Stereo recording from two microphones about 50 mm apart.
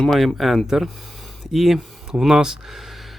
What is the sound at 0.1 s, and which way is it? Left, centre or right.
Speech, centre.